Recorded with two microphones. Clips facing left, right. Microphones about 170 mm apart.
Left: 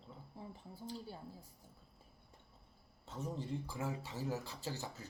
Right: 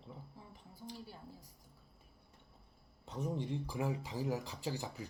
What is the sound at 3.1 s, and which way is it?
Speech, 15° right (ahead or behind).